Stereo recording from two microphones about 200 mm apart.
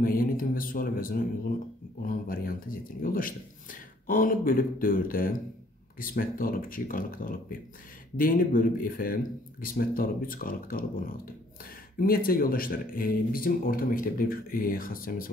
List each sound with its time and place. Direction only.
0.0 s speech: 45° left (ahead or behind)